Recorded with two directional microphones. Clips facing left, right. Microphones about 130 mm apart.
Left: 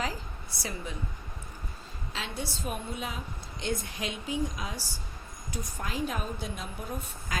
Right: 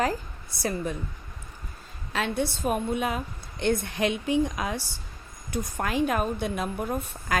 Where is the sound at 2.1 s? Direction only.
60° right (ahead or behind).